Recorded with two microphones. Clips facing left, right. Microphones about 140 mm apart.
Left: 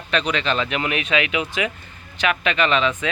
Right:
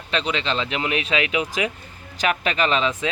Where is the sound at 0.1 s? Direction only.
25° right (ahead or behind).